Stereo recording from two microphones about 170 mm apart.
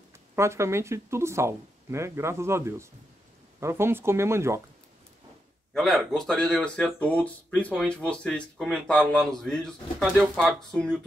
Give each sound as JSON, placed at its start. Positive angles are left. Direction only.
{"t": 0.4, "sound": "speech", "side_deg": -15}
{"t": 5.7, "sound": "a sound", "side_deg": 0}
{"t": 6.1, "sound": "speech", "side_deg": 5}